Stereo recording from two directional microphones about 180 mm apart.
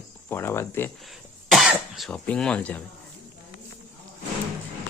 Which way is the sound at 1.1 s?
Centre (ahead or behind).